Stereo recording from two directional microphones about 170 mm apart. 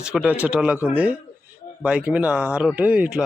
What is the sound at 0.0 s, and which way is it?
Speech, 5° right (ahead or behind).